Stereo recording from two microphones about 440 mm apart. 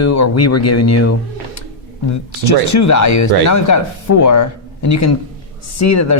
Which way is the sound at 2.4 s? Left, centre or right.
Left.